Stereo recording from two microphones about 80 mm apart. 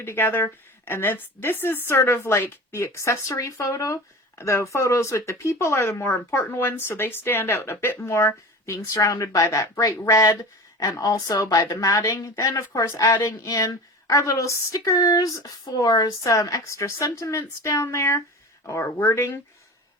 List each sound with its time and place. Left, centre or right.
0.0 s speech: left
9.0 s a woman's voice: left